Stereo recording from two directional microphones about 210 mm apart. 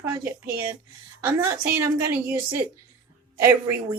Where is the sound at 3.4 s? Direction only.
10° right (ahead or behind).